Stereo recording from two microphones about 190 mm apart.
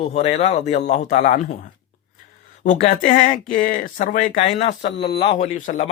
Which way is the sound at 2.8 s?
45° left (ahead or behind).